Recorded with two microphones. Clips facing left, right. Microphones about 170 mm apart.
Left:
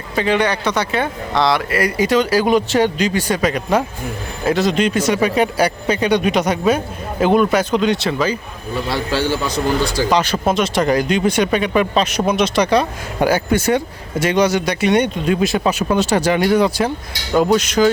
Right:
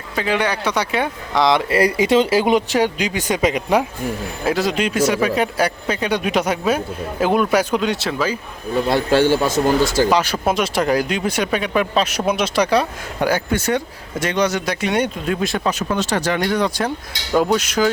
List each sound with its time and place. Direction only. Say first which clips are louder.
0.2 s speech: left 3 dB; 5° right (ahead or behind); by 2.6 s 20° right (ahead or behind)
2.7 s speech: left 3 dB; 10° right (ahead or behind)
8.9 s a man's voice: right 4 dB; 50° right (ahead or behind)
10.1 s speech: left 1 dB; 5° right (ahead or behind)